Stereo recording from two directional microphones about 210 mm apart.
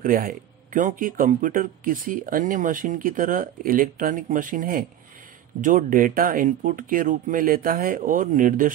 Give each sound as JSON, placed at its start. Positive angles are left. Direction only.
{"t": 0.0, "sound": "speech", "side_deg": -40}